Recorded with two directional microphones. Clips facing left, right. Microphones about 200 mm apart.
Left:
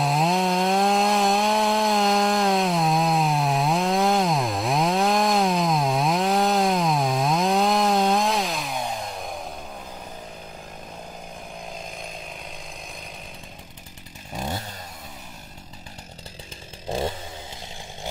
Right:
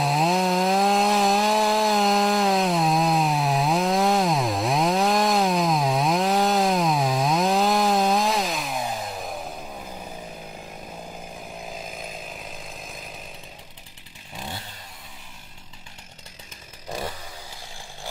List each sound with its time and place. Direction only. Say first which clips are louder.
0.0 s chainsaw: even; centre (ahead or behind)
11.6 s chainsaw: right 1 dB; 5° right (ahead or behind)
14.3 s chainsaw: left 6 dB; 45° left (ahead or behind)
16.9 s a sound: left 5 dB; 25° left (ahead or behind)